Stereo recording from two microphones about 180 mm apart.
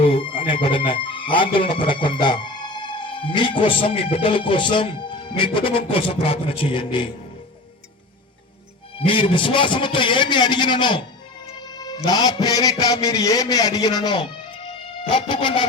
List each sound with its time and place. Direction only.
0.0 s speech: 30° left (ahead or behind)
9.0 s music: 30° left (ahead or behind)